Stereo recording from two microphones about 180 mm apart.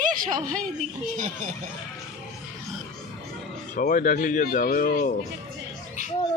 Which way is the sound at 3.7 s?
45° left (ahead or behind).